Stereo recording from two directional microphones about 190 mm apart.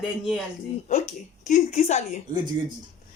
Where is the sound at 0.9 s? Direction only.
40° left (ahead or behind).